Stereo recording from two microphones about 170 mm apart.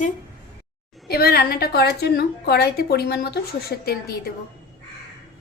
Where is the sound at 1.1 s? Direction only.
65° left (ahead or behind).